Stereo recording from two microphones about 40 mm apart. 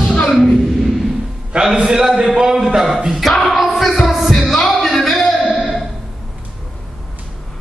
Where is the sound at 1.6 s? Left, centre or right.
Centre.